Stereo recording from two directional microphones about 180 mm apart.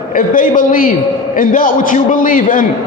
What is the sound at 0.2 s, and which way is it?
A man's voice, 50° left (ahead or behind).